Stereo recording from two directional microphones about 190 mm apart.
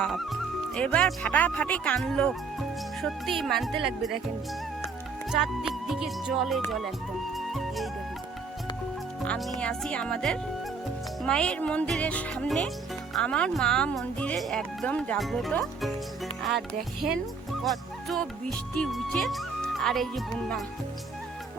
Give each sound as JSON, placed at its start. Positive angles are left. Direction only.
{"t": 0.0, "sound": "speech", "side_deg": 0}
{"t": 5.3, "sound": "speech", "side_deg": 0}
{"t": 7.3, "sound": "music", "side_deg": 0}
{"t": 9.6, "sound": "speech", "side_deg": 5}